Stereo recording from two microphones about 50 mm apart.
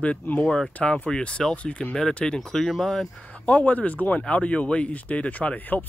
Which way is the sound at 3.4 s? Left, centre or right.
Left.